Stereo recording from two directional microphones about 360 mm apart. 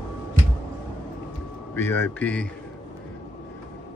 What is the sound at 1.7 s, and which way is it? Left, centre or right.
Speech, centre.